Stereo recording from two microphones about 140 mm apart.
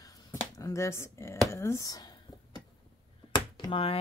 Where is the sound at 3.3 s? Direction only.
35° left (ahead or behind).